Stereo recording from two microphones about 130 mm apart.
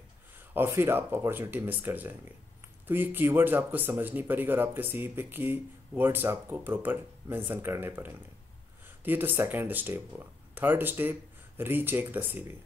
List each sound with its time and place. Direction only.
0.6 s speech: 20° right (ahead or behind)